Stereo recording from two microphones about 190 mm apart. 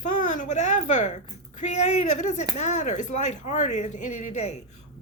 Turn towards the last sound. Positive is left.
turn(degrees=35)  # may be behind; listen again after turning